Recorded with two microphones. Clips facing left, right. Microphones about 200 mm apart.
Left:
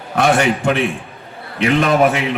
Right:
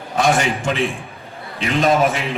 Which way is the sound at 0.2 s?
65° left (ahead or behind).